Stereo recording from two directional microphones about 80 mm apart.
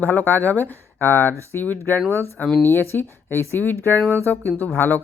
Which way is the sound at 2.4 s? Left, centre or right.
Centre.